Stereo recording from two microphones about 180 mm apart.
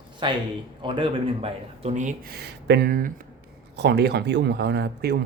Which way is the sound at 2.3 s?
60° right (ahead or behind).